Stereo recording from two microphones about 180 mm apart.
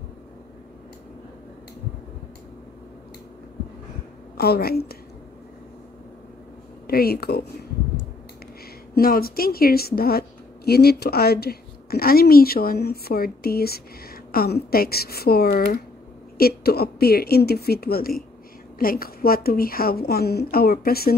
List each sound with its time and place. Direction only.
4.4 s a woman's voice: 60° left (ahead or behind)
6.9 s a woman's voice: 60° left (ahead or behind)
8.9 s a woman's voice: 55° left (ahead or behind)